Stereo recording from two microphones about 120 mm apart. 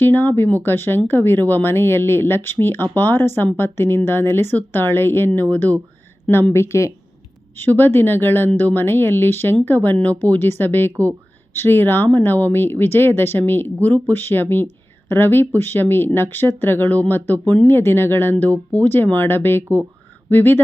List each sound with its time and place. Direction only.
0.0 s a woman's voice: 15° left (ahead or behind)